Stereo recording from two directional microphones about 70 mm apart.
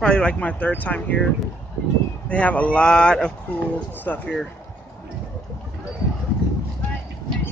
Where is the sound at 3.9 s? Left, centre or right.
Left.